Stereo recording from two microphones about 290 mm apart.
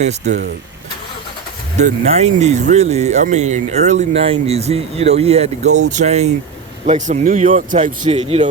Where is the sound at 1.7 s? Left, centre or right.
Right.